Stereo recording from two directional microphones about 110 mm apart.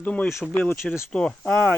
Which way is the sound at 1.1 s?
10° left (ahead or behind).